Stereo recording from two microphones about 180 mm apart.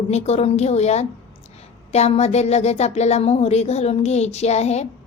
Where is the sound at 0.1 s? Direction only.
35° left (ahead or behind).